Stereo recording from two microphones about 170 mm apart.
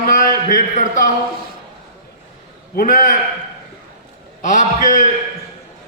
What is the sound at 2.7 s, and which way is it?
Speech, 50° left (ahead or behind).